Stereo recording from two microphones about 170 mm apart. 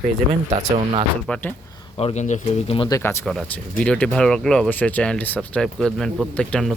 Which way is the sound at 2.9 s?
15° left (ahead or behind).